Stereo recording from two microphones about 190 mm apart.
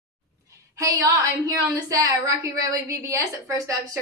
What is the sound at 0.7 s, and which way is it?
A woman's voice, 15° right (ahead or behind).